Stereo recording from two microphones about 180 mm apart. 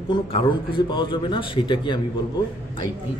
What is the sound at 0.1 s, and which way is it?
A man's voice, 30° left (ahead or behind).